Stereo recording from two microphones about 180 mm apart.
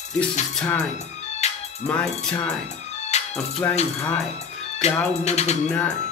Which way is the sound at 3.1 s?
40° left (ahead or behind).